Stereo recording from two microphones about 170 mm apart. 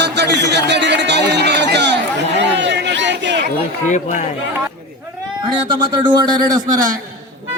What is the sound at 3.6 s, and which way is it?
Speech, 45° left (ahead or behind).